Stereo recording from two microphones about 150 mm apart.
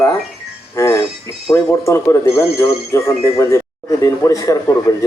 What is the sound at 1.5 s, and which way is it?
A man's voice, 20° left (ahead or behind).